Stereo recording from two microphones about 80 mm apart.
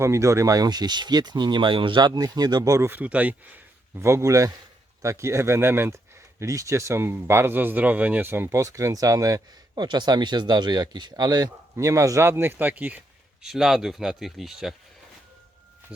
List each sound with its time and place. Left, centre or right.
0.0 s speech: right
2.8 s speech: right
3.9 s speech: right
8.4 s speech: right
9.7 s speech: right; by 13.0 s centre
13.4 s speech: centre